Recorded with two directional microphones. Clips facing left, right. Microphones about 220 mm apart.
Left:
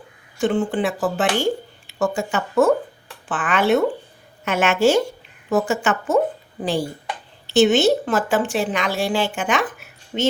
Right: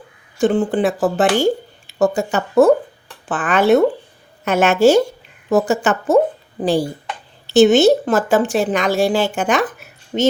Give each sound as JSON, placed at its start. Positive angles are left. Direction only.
{"t": 0.3, "sound": "a woman's voice", "side_deg": -35}